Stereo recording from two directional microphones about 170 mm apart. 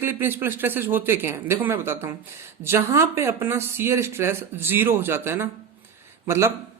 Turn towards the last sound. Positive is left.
turn(degrees=-15)  # may be behind; listen again after turning